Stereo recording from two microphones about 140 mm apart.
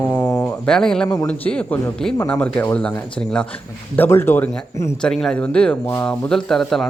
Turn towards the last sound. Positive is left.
turn(degrees=0)  # may be behind; listen again after turning